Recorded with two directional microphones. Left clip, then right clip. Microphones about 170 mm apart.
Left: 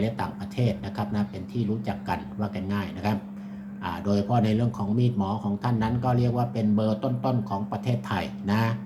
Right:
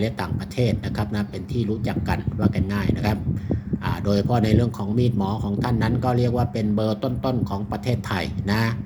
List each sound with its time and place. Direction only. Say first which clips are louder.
0.0 s speech: right 3 dB; 45° right (ahead or behind)